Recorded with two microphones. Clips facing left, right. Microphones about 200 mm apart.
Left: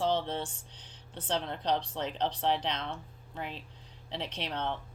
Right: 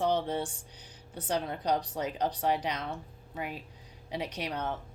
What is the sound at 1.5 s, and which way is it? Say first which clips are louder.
Speech: right 1 dB; 10° right (ahead or behind).